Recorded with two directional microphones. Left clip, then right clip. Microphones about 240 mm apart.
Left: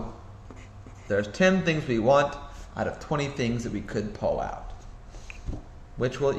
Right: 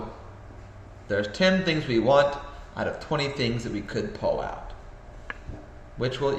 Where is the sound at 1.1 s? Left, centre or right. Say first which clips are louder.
Even; left.